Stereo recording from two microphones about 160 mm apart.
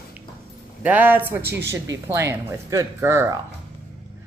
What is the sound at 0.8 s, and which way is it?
Speech, 10° right (ahead or behind).